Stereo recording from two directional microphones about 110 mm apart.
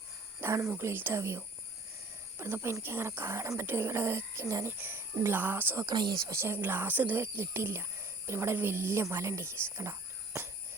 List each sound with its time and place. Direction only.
0.4 s a sound: 20° right (ahead or behind)
0.8 s speech: 20° right (ahead or behind)
5.8 s speech: 40° right (ahead or behind)
6.3 s speech: 20° right (ahead or behind)